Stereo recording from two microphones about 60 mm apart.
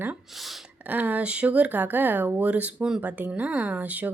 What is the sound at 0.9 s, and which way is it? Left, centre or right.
A woman's voice, right.